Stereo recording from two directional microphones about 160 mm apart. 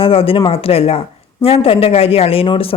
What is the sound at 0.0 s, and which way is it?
Speech, 35° left (ahead or behind).